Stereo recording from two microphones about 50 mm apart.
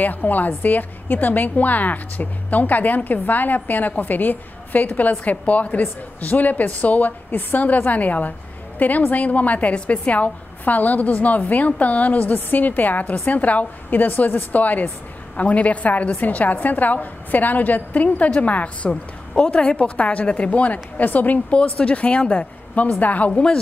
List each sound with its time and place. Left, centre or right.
0.0 s a woman's voice: left
21.5 s a woman's voice: left